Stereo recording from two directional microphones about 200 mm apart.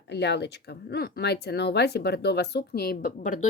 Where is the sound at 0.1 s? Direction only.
55° left (ahead or behind).